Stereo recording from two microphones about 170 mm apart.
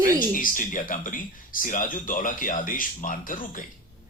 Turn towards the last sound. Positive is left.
turn(degrees=55)  # may be behind; listen again after turning